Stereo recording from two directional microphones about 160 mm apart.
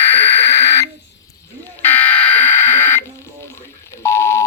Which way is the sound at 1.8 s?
10° left (ahead or behind).